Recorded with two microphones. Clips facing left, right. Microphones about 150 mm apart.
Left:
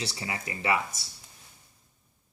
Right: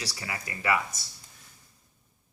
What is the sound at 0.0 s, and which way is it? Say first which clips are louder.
Speech: left 2 dB; 25° left (ahead or behind).